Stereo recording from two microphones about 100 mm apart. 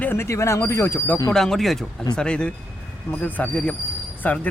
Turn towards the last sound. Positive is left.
turn(degrees=15)  # may be behind; listen again after turning